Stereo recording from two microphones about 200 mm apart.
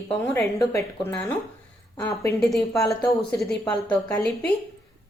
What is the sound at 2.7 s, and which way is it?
Speech, 15° left (ahead or behind).